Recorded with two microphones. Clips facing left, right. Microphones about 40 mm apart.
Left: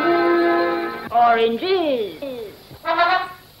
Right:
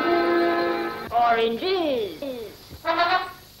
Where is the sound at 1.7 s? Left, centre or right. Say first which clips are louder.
Left 4 dB; centre.